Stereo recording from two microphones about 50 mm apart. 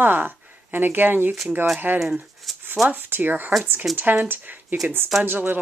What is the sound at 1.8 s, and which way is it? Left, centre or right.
Speech, right.